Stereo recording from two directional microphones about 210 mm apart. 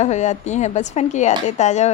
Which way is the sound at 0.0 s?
35° left (ahead or behind).